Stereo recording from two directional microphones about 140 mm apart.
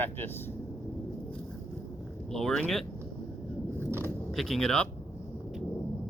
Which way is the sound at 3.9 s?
15° right (ahead or behind).